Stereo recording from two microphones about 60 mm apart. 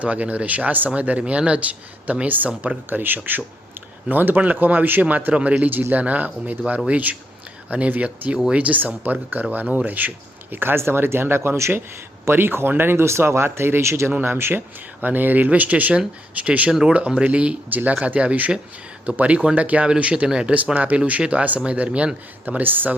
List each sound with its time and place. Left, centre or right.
0.0 s speech: right